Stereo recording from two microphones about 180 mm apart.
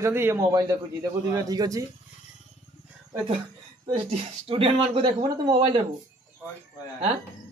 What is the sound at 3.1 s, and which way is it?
Speech, 30° right (ahead or behind).